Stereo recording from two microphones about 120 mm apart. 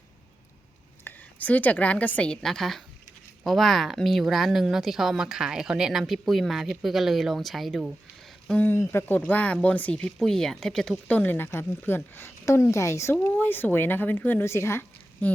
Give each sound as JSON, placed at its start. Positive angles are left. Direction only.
{"t": 1.0, "sound": "a woman's voice", "side_deg": 15}
{"t": 8.4, "sound": "a woman's voice", "side_deg": 15}